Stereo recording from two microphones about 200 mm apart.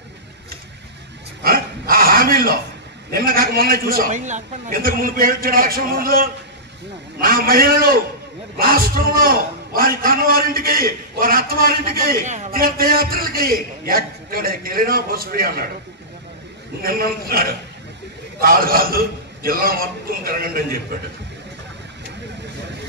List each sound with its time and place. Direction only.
1.4 s dog: 45° right (ahead or behind)
3.1 s a man's voice: 45° right (ahead or behind)
16.8 s a man's voice: 50° right (ahead or behind)